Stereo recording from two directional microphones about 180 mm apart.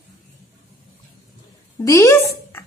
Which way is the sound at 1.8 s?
15° left (ahead or behind).